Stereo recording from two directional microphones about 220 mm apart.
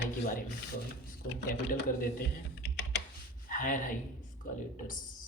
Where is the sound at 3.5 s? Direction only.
40° left (ahead or behind).